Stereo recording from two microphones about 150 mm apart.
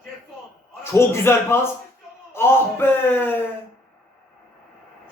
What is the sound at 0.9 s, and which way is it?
Speech, 15° left (ahead or behind).